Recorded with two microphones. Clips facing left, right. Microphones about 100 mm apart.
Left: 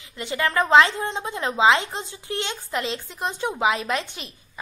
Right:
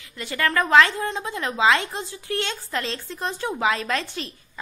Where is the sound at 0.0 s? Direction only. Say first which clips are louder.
Even; 20° left (ahead or behind).